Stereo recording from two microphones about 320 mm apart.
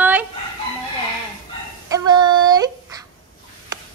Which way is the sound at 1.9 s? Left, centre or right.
Centre.